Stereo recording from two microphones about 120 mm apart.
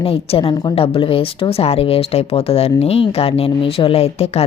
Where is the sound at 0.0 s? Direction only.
50° left (ahead or behind).